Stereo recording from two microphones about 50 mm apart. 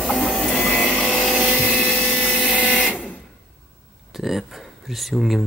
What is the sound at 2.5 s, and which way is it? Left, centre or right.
Printer, left.